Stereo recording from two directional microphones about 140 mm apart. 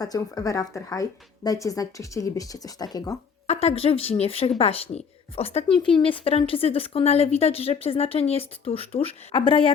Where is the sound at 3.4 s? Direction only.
45° left (ahead or behind).